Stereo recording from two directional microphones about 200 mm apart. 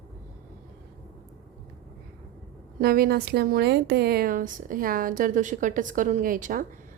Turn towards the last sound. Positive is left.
turn(degrees=-45)  # may be behind; listen again after turning